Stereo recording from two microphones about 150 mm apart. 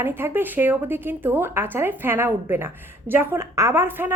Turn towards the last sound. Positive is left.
turn(degrees=-15)  # may be behind; listen again after turning